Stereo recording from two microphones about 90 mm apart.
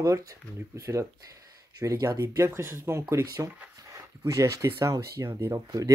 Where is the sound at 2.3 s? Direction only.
35° right (ahead or behind).